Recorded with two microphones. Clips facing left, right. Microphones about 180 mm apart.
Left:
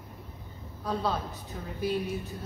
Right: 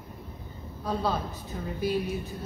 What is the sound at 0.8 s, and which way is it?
A woman's voice, centre (ahead or behind).